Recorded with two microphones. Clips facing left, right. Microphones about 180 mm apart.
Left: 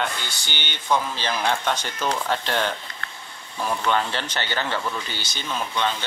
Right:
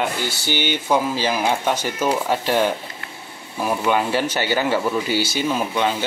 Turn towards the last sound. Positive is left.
turn(degrees=-10)  # may be behind; listen again after turning